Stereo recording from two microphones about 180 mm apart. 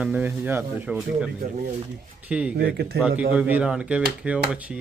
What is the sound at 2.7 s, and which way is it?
Speech, 65° right (ahead or behind).